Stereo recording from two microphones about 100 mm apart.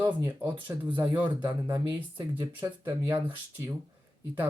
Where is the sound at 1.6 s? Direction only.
20° right (ahead or behind).